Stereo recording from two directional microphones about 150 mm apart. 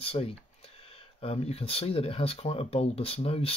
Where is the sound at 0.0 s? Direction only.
40° left (ahead or behind).